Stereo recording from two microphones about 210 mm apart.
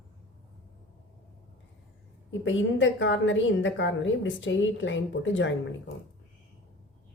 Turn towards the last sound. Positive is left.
turn(degrees=60)  # may be behind; listen again after turning